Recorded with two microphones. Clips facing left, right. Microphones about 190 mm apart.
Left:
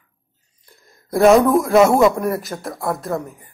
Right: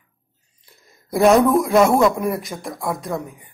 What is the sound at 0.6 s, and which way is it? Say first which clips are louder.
A man's voice: left 2 dB; centre (ahead or behind).